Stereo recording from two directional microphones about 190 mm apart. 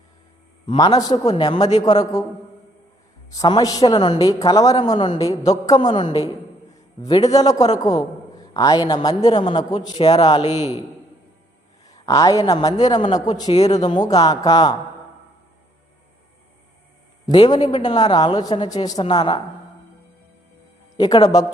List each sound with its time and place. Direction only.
0.7 s a man's voice: 20° left (ahead or behind)
3.3 s a man's voice: 20° left (ahead or behind)
7.3 s a man's voice: 20° left (ahead or behind)
12.0 s a man's voice: 20° left (ahead or behind)
17.3 s a man's voice: 25° left (ahead or behind)
21.0 s a man's voice: 20° left (ahead or behind)